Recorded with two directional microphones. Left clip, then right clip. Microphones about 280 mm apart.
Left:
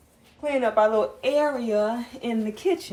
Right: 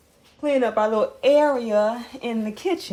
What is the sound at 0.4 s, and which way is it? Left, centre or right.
Speech, right.